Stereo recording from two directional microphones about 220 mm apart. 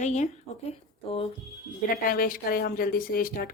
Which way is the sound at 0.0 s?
30° left (ahead or behind).